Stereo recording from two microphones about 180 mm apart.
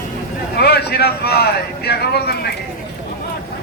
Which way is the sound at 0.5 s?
65° left (ahead or behind).